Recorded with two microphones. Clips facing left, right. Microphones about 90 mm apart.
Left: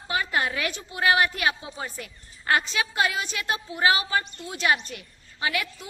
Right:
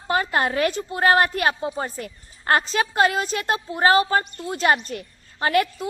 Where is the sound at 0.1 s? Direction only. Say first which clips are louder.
Right 5 dB; 40° right (ahead or behind).